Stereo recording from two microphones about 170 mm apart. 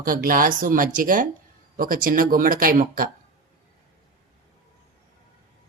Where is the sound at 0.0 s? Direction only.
55° right (ahead or behind).